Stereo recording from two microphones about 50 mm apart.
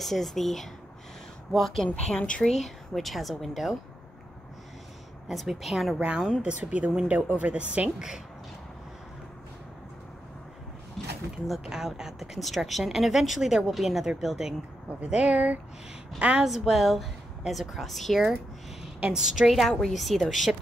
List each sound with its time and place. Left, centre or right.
0.0 s speech: centre
2.0 s speech: centre
2.4 s speech: centre
5.3 s speech: centre
6.0 s a woman's voice: centre
6.4 s speech: right
11.0 s a sound: centre
11.6 s speech: centre
15.0 s a woman's voice: centre
16.4 s speech: centre
18.9 s a woman's voice: centre